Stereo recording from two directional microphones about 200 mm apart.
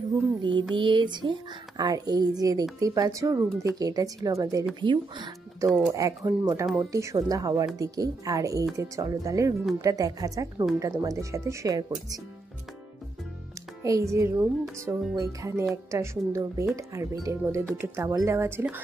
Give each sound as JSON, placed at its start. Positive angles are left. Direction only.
{"t": 0.4, "sound": "music", "side_deg": -25}
{"t": 0.7, "sound": "speech", "side_deg": -25}
{"t": 13.8, "sound": "speech", "side_deg": -15}